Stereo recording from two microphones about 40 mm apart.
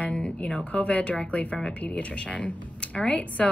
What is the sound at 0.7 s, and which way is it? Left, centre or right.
A woman's voice, left.